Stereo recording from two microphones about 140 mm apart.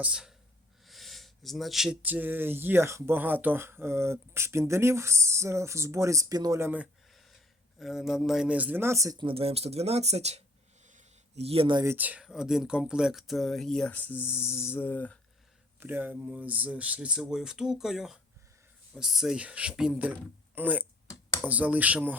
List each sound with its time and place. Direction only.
0.0 s speech: 5° right (ahead or behind)
7.1 s a sound: centre (ahead or behind)
7.8 s speech: centre (ahead or behind); by 9.2 s 25° right (ahead or behind)
9.2 s speech: 40° right (ahead or behind)
10.8 s a sound: 55° right (ahead or behind)
11.8 s speech: 15° right (ahead or behind); by 15.2 s 10° left (ahead or behind)
15.8 s speech: 15° right (ahead or behind)